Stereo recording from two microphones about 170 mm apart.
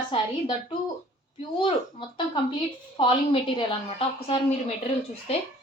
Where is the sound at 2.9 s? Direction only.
30° left (ahead or behind).